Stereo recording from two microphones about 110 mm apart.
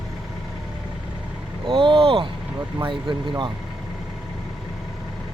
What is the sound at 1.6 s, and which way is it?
Speech, 50° right (ahead or behind).